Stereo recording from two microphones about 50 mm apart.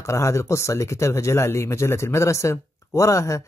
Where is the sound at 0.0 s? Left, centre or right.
Left.